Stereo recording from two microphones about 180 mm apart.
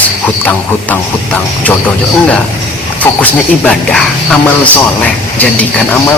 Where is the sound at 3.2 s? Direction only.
5° left (ahead or behind).